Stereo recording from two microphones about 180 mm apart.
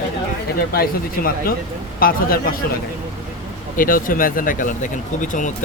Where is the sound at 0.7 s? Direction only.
55° left (ahead or behind).